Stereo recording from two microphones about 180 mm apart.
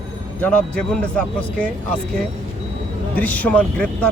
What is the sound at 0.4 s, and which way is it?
Speech, 5° left (ahead or behind).